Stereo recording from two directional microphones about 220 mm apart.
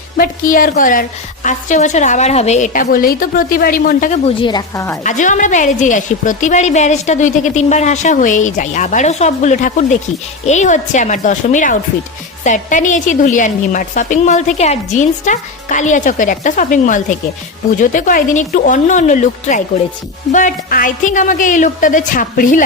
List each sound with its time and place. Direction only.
0.2 s a woman's voice: 40° left (ahead or behind); by 4.9 s 15° left (ahead or behind)
5.0 s a woman's voice: 35° left (ahead or behind)